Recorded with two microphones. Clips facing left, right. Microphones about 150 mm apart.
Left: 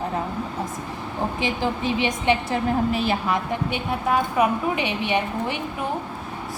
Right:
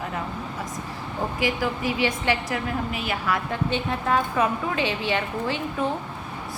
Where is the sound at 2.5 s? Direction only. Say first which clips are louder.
Left 6 dB; 30° left (ahead or behind).